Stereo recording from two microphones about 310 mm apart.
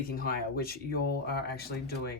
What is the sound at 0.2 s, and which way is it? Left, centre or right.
Speech, left.